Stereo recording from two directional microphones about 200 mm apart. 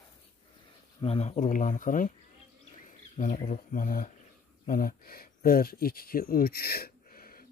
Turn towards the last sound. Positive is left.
turn(degrees=45)  # may be behind; listen again after turning